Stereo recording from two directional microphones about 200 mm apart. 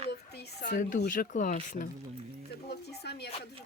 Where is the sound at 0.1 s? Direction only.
50° left (ahead or behind).